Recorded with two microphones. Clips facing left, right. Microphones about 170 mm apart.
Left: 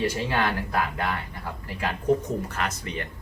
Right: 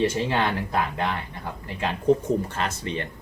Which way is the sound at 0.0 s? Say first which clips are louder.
Right 2 dB; 25° right (ahead or behind).